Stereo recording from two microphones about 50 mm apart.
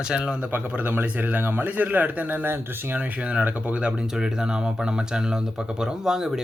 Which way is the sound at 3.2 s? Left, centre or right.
Right.